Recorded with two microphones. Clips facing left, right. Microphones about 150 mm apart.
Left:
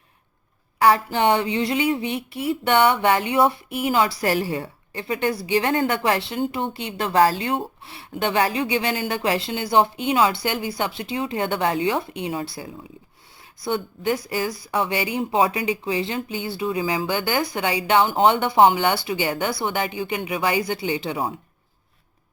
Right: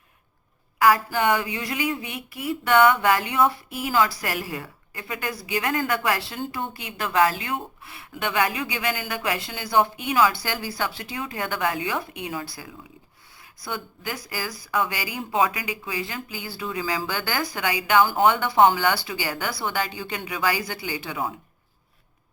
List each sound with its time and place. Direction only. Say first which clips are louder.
0.8 s speech: left 2 dB; 30° left (ahead or behind)